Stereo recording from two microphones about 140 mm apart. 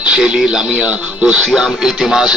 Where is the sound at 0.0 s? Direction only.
5° right (ahead or behind).